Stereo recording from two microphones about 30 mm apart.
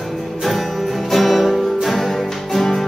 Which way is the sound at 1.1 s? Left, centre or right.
Centre.